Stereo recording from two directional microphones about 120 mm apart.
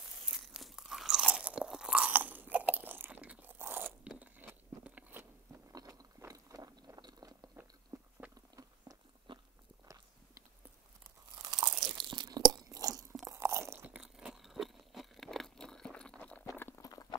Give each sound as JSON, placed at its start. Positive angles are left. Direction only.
{"t": 0.0, "sound": "crunch", "side_deg": -5}
{"t": 4.1, "sound": "biting", "side_deg": -15}
{"t": 5.7, "sound": "a sound", "side_deg": -30}
{"t": 7.9, "sound": "biting", "side_deg": -30}
{"t": 8.4, "sound": "chewing", "side_deg": -30}
{"t": 9.3, "sound": "biting", "side_deg": -45}
{"t": 11.3, "sound": "crunch", "side_deg": -25}
{"t": 11.8, "sound": "crunch", "side_deg": -40}
{"t": 16.5, "sound": "clip-clop", "side_deg": 20}